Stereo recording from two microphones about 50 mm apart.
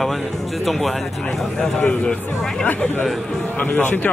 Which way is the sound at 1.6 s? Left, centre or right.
Centre.